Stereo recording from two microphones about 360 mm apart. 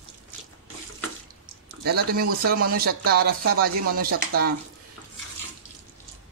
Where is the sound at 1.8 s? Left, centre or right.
Right.